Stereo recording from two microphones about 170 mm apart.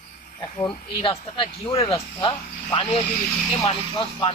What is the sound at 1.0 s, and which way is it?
Speech, 35° left (ahead or behind).